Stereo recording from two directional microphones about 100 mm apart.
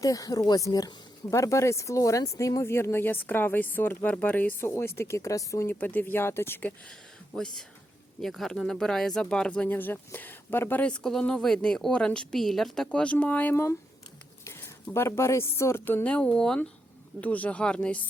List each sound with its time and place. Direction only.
0.0 s speech: 35° left (ahead or behind); by 6.7 s 20° left (ahead or behind)
7.3 s speech: 5° left (ahead or behind)